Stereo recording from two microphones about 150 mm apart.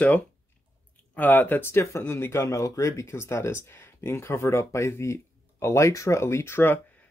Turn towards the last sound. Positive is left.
turn(degrees=15)  # may be behind; listen again after turning